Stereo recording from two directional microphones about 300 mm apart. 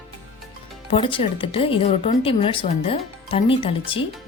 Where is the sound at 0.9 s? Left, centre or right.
Centre.